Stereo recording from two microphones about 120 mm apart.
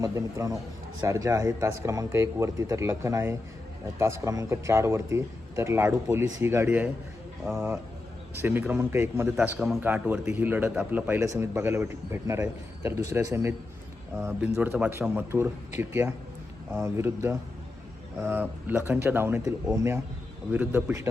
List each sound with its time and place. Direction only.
0.0 s a man's voice: 30° right (ahead or behind)
9.3 s a man's voice: 5° right (ahead or behind)